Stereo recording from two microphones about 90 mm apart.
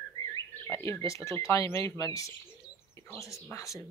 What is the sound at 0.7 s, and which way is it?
Speech, 30° left (ahead or behind).